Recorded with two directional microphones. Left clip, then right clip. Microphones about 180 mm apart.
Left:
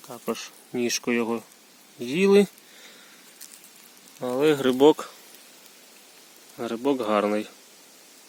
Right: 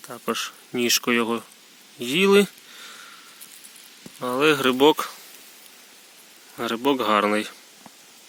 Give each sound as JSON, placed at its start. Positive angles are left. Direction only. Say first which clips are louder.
{"t": 0.3, "sound": "speech", "louder": "right 5 dB", "side_deg": 0}
{"t": 4.2, "sound": "speech", "louder": "right 2 dB", "side_deg": 5}
{"t": 6.6, "sound": "speech", "louder": "right 3 dB", "side_deg": 0}